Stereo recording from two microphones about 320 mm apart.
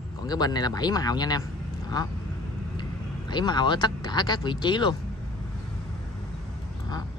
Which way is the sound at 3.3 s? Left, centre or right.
Centre.